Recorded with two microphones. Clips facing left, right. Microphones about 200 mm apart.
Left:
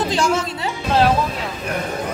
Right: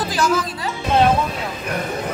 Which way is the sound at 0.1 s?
25° left (ahead or behind).